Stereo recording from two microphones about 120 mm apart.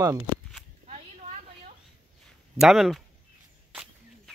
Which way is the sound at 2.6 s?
Centre (ahead or behind).